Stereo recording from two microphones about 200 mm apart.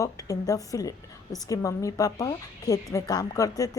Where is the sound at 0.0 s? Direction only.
15° left (ahead or behind).